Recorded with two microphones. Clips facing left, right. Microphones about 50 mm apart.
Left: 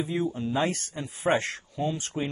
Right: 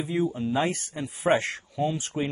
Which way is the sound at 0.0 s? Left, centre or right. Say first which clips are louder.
Right 2 dB; right.